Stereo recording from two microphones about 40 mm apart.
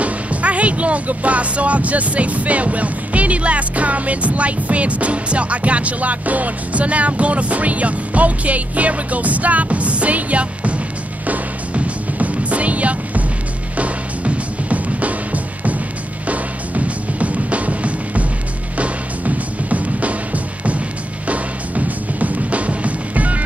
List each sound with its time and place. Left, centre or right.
0.0 s speech: right
11.2 s music: right